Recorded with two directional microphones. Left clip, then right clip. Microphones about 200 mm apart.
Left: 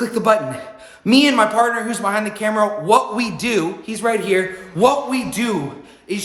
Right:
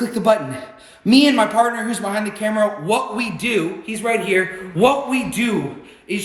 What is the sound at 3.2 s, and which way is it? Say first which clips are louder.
Speech: left 1 dB; 30° left (ahead or behind).